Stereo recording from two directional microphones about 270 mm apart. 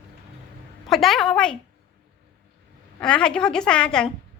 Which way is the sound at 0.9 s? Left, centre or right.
Centre.